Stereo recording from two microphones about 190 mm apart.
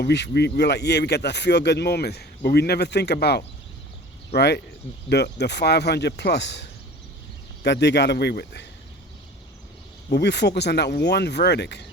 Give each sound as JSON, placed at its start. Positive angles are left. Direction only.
{"t": 0.0, "sound": "speech", "side_deg": 60}
{"t": 10.1, "sound": "speech", "side_deg": 60}